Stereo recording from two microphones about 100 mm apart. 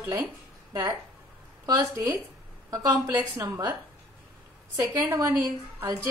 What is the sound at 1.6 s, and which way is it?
Speech, 35° right (ahead or behind).